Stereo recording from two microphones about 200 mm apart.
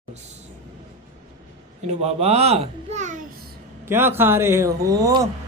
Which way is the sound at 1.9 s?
30° right (ahead or behind).